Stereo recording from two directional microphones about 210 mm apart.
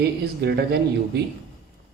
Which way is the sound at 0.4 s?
50° right (ahead or behind).